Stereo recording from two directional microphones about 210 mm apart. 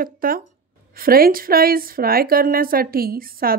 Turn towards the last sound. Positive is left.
turn(degrees=-45)  # may be behind; listen again after turning